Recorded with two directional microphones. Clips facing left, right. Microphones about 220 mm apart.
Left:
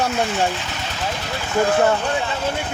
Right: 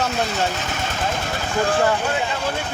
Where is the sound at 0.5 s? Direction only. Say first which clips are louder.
Right 3 dB; 50° right (ahead or behind).